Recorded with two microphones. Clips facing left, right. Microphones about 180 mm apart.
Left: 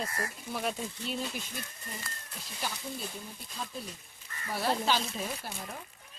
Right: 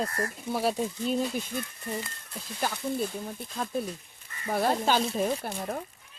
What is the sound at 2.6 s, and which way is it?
Speech, 55° right (ahead or behind).